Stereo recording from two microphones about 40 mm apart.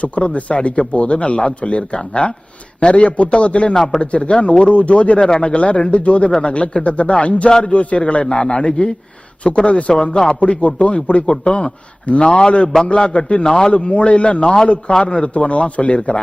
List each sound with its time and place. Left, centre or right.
0.0 s speech: left
10.4 s speech: left
13.4 s a man's voice: centre
13.7 s speech: left